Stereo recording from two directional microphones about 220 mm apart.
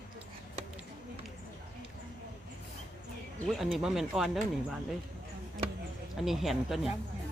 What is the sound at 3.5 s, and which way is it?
Speech, centre (ahead or behind).